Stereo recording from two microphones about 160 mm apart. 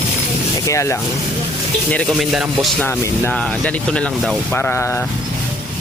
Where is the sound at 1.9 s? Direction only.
10° left (ahead or behind).